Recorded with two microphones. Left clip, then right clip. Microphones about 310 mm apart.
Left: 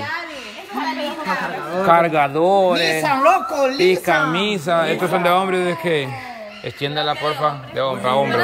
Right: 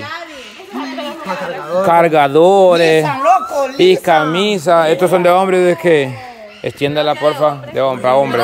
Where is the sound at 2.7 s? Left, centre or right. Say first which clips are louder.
Right 6 dB; right.